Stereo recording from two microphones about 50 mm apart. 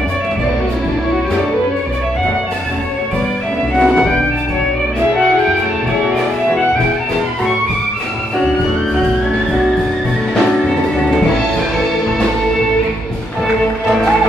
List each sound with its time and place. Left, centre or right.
3.8 s music: centre